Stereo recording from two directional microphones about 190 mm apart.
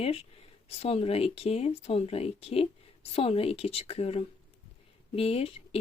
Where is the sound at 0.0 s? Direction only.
30° left (ahead or behind).